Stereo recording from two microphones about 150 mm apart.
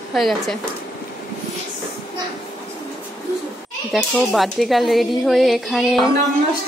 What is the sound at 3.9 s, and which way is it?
A woman's voice, centre (ahead or behind).